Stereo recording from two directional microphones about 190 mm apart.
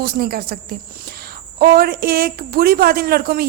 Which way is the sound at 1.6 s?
55° right (ahead or behind).